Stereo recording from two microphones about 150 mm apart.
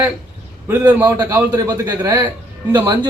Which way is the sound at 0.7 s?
10° right (ahead or behind).